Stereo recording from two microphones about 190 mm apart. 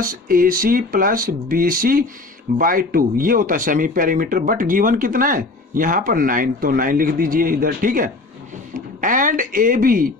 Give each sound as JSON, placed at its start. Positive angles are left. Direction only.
{"t": 0.0, "sound": "speech", "side_deg": -45}